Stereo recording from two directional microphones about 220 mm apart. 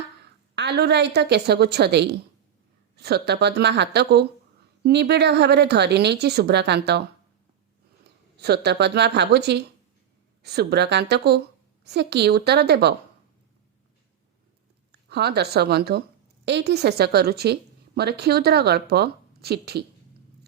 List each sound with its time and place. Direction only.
0.5 s a woman's voice: 50° right (ahead or behind)
8.1 s a sound: 50° right (ahead or behind)
8.4 s a woman's voice: 45° right (ahead or behind)
15.1 s a woman's voice: 50° right (ahead or behind)